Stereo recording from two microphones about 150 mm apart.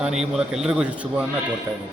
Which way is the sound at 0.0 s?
5° right (ahead or behind).